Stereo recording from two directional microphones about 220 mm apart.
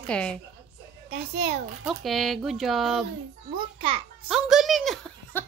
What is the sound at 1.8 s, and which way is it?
Speech, centre (ahead or behind).